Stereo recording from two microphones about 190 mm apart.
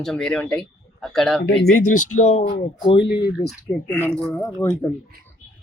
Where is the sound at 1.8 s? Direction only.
40° left (ahead or behind); by 3.1 s 25° left (ahead or behind).